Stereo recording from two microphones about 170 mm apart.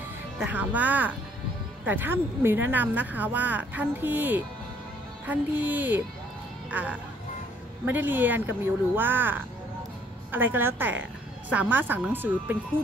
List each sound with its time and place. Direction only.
0.4 s speech: 10° right (ahead or behind)